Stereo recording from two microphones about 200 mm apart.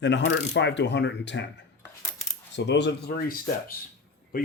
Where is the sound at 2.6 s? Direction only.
60° left (ahead or behind).